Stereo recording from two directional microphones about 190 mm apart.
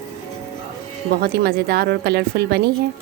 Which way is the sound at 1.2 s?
55° right (ahead or behind).